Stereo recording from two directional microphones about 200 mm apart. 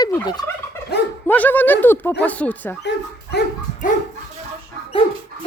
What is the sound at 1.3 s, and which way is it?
Speech, 10° left (ahead or behind).